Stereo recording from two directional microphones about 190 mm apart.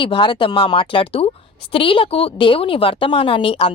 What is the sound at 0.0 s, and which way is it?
Speech, 25° left (ahead or behind).